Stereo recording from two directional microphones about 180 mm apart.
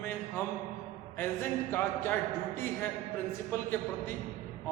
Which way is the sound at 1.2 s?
10° left (ahead or behind).